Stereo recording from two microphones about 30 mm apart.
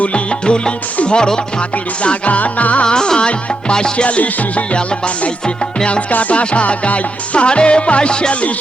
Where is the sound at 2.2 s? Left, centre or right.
Left.